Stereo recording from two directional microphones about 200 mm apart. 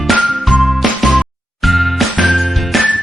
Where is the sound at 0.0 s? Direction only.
Centre (ahead or behind).